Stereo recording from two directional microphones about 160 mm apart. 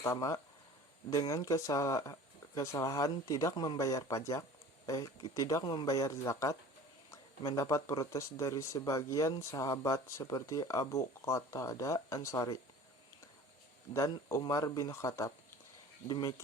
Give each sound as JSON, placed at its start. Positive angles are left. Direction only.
{"t": 0.0, "sound": "speech", "side_deg": 20}
{"t": 13.9, "sound": "speech", "side_deg": 20}